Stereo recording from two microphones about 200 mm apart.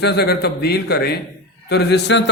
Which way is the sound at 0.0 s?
55° left (ahead or behind).